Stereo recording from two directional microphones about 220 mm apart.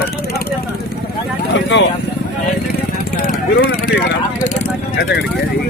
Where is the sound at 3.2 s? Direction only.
40° left (ahead or behind).